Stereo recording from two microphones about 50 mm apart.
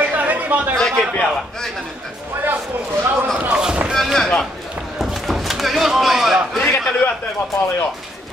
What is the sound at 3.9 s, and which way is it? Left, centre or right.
Speech, centre.